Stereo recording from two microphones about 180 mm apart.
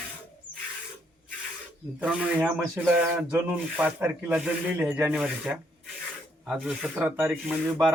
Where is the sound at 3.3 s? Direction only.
5° right (ahead or behind).